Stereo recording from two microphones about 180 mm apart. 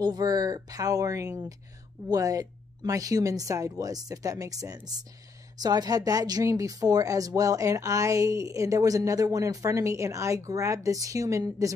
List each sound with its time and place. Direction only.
0.0 s speech: 20° right (ahead or behind)